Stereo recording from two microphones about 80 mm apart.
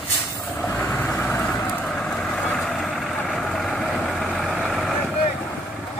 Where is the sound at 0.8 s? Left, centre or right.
Centre.